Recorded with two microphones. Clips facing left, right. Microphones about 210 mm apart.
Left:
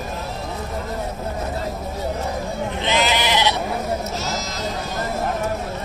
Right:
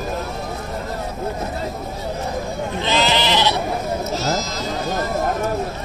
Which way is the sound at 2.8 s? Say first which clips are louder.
Right 2 dB; 15° left (ahead or behind).